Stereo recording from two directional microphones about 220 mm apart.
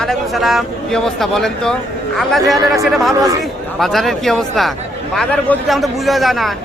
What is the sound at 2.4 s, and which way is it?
Speech, 15° right (ahead or behind).